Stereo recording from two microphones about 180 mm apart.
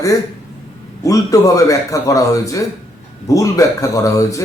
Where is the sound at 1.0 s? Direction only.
20° left (ahead or behind).